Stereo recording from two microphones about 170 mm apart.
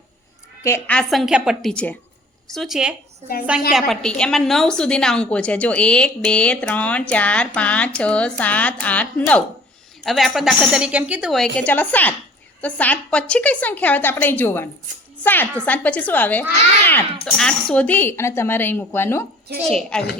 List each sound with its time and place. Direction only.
0.6 s a woman's voice: 15° left (ahead or behind)
0.9 s a woman's voice: centre (ahead or behind)